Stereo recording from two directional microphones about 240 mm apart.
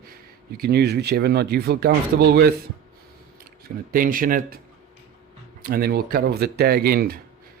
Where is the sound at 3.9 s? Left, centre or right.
Right.